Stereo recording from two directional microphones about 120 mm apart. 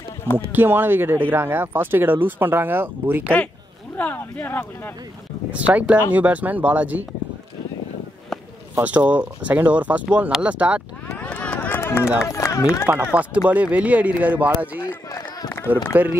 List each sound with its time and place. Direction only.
0.5 s speech: 15° right (ahead or behind)
3.9 s speech: 15° left (ahead or behind)
5.5 s speech: 10° right (ahead or behind)
8.7 s speech: 10° right (ahead or behind)
11.1 s vehicle: 10° left (ahead or behind)
11.8 s run: 25° left (ahead or behind)
12.3 s speech: 25° left (ahead or behind)
12.8 s speech: 15° right (ahead or behind)
15.0 s run: 30° left (ahead or behind)
15.9 s speech: 15° right (ahead or behind)